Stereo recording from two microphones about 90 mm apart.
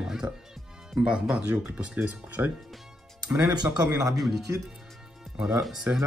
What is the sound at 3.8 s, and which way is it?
Speech, 40° right (ahead or behind).